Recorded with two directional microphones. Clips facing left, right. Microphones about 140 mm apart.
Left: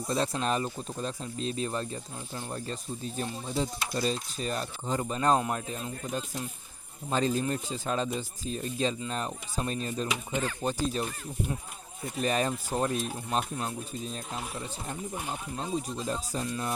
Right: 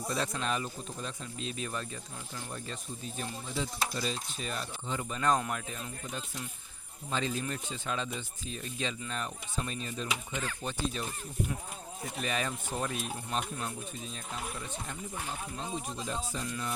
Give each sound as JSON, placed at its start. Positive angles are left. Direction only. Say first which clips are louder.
{"t": 0.1, "sound": "speech", "louder": "left 5 dB", "side_deg": 35}
{"t": 12.2, "sound": "speech", "louder": "left 7 dB", "side_deg": 40}